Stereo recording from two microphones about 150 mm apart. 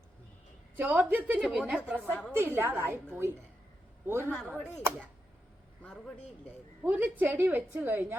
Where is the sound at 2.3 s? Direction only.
15° right (ahead or behind).